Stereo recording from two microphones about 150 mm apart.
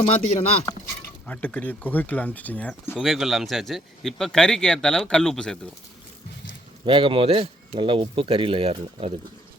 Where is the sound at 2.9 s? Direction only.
Centre (ahead or behind).